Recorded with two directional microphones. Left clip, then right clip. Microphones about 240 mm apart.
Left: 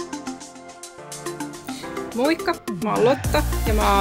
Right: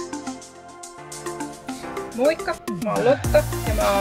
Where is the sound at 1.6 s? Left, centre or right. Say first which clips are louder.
Even; centre.